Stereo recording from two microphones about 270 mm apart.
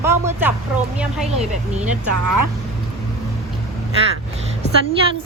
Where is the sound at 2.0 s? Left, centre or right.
Right.